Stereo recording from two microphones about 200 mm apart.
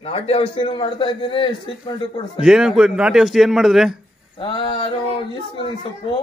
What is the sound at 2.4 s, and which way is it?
A man's voice, 5° right (ahead or behind).